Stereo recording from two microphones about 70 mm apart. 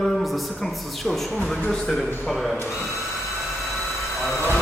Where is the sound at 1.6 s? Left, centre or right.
Centre.